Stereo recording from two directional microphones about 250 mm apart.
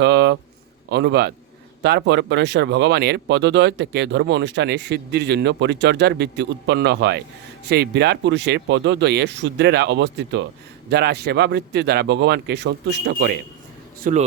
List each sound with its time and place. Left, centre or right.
0.0 s a sound: right
0.9 s a man's voice: right
14.0 s a man's voice: right